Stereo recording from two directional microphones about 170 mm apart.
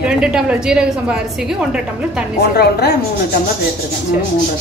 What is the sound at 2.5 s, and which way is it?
Speech, 70° left (ahead or behind).